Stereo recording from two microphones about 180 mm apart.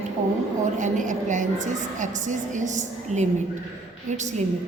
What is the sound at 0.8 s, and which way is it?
A woman's voice, 45° right (ahead or behind).